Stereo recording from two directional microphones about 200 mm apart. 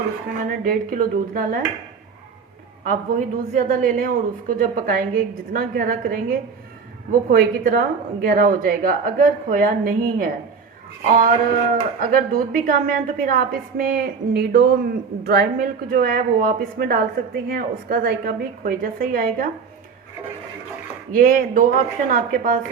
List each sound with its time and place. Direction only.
0.3 s speech: 45° right (ahead or behind)
2.8 s speech: 45° right (ahead or behind)
21.1 s speech: 45° right (ahead or behind)